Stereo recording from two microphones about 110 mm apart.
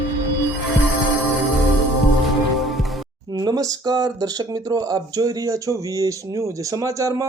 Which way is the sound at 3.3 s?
35° right (ahead or behind).